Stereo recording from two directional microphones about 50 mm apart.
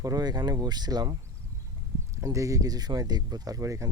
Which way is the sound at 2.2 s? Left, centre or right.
Right.